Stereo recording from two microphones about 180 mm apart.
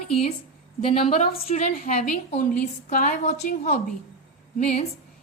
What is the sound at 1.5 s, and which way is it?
A woman's voice, 35° left (ahead or behind).